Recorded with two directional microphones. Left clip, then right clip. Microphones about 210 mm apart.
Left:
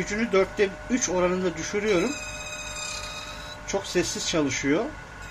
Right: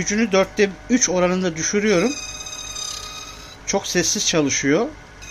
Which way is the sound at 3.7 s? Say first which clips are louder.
Right 6 dB; 50° right (ahead or behind).